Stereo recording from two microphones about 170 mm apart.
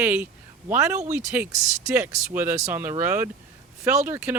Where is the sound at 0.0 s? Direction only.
10° right (ahead or behind).